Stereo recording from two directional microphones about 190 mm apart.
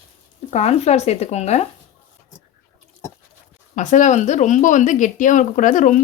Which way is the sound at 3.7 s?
40° left (ahead or behind).